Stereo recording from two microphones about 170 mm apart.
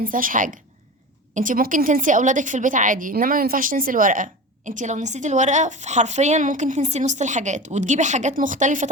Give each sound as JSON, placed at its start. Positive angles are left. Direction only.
{"t": 0.0, "sound": "a woman's voice", "side_deg": -55}